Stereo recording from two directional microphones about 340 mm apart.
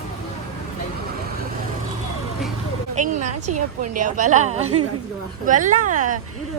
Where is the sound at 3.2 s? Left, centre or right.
Right.